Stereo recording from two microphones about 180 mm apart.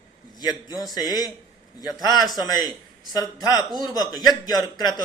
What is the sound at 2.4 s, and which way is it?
A man's voice, 20° left (ahead or behind).